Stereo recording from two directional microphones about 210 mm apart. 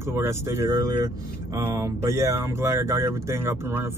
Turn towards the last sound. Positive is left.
turn(degrees=-10)  # may be behind; listen again after turning